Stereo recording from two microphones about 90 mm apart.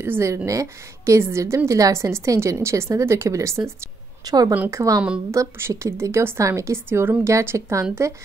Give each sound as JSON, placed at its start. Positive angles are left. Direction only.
{"t": 0.0, "sound": "a woman's voice", "side_deg": -30}
{"t": 4.2, "sound": "speech", "side_deg": -45}
{"t": 4.6, "sound": "a woman's voice", "side_deg": -35}